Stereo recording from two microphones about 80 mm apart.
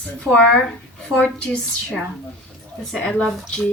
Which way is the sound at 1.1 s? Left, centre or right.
Centre.